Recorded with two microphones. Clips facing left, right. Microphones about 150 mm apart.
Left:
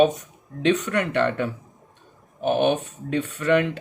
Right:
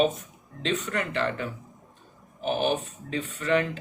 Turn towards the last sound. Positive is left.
turn(degrees=70)  # may be behind; listen again after turning